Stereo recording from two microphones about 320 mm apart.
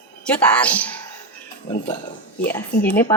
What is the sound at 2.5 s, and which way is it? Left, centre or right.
Speech, centre.